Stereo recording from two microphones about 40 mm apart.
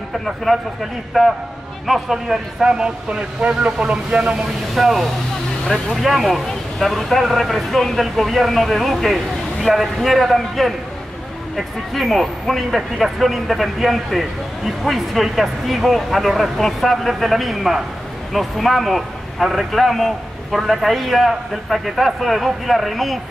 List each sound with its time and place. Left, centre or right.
0.5 s speech: centre; by 4.5 s right
4.7 s speech: centre